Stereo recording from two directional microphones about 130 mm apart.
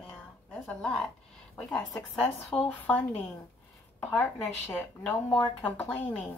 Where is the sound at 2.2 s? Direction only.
10° left (ahead or behind).